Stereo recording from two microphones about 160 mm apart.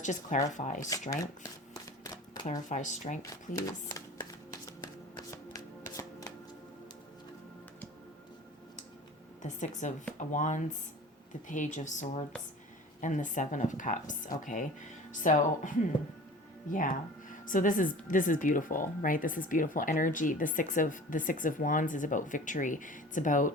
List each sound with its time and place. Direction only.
0.0 s speech: 50° left (ahead or behind)
1.7 s shuffling cards: 25° left (ahead or behind)
2.5 s speech: 50° left (ahead or behind)
3.7 s shuffling cards: 20° left (ahead or behind)
9.4 s speech: 50° left (ahead or behind)